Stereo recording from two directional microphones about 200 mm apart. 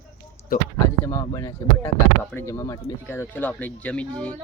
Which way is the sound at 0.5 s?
45° left (ahead or behind).